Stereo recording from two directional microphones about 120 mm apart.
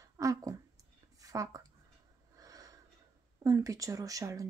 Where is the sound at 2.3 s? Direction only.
30° right (ahead or behind).